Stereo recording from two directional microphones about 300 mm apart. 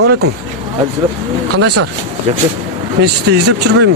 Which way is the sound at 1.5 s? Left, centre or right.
Right.